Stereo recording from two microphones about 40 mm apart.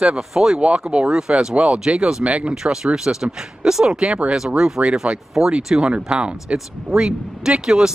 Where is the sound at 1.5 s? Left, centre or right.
Right.